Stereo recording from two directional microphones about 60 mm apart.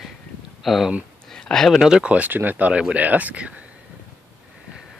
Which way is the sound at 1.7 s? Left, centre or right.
Centre.